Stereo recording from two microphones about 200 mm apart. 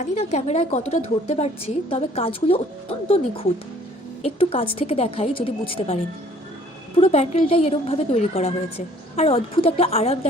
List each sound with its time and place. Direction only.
0.0 s a woman's voice: 35° left (ahead or behind)
4.2 s a woman's voice: 30° left (ahead or behind)
7.0 s a woman's voice: 30° left (ahead or behind)